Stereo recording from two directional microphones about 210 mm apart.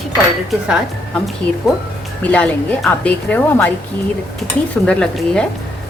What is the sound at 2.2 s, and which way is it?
Speech, 5° left (ahead or behind).